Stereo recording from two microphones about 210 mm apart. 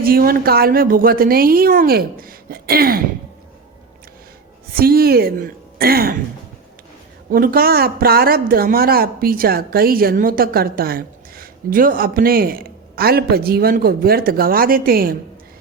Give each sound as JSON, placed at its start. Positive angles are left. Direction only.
{"t": 0.0, "sound": "speech", "side_deg": -45}
{"t": 4.7, "sound": "a woman's voice", "side_deg": -45}
{"t": 7.3, "sound": "speech", "side_deg": -45}